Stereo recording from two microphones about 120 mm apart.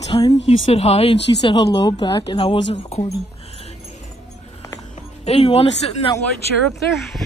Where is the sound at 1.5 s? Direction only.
40° left (ahead or behind).